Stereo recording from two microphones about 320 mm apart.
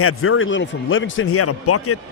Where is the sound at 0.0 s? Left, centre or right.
Left.